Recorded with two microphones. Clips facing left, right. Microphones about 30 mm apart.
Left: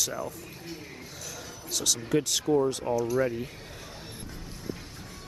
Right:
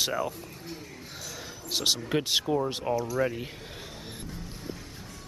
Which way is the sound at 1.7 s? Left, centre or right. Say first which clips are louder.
Right 1 dB; right.